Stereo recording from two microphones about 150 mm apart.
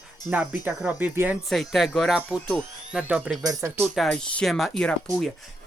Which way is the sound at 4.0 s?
5° left (ahead or behind).